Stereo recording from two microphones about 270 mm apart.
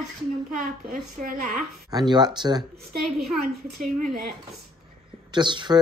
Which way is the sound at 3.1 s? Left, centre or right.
Centre.